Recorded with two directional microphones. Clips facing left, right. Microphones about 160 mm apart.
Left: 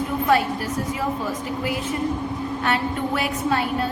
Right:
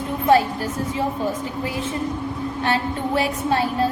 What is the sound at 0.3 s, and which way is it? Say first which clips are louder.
A woman's voice: right 5 dB; 30° right (ahead or behind).